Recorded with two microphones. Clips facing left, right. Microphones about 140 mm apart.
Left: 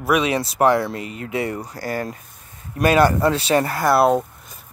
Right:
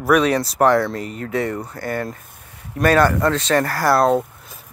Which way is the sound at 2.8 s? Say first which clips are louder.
Even; 10° left (ahead or behind).